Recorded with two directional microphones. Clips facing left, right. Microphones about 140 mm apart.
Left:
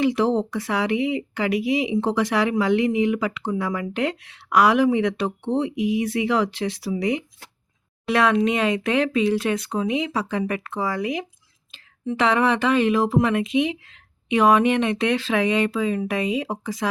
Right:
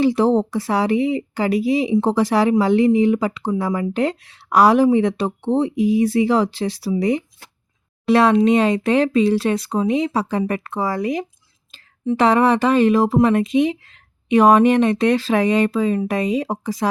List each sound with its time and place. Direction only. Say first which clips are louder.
0.0 s speech: right 4 dB; 35° right (ahead or behind)